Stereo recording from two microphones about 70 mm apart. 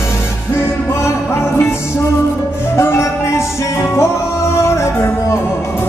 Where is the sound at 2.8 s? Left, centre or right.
Left.